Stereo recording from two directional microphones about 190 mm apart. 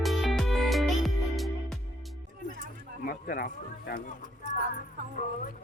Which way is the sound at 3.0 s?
50° left (ahead or behind).